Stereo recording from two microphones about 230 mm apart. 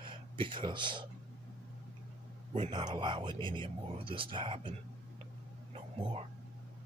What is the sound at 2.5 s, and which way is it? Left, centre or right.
Speech, right.